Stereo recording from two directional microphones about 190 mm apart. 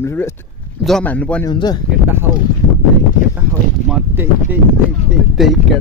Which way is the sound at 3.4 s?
5° right (ahead or behind).